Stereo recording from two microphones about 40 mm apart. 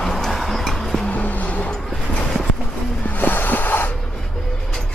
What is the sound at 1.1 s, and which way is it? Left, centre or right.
Vehicle, left.